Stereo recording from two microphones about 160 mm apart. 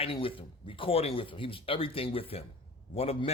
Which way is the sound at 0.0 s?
35° left (ahead or behind).